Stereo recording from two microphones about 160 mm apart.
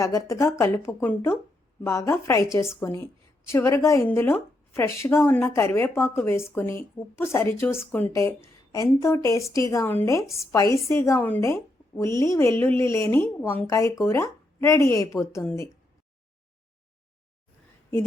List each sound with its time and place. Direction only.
0.0 s a woman's voice: 20° left (ahead or behind)